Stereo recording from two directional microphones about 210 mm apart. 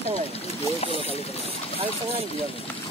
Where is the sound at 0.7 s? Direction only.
25° left (ahead or behind).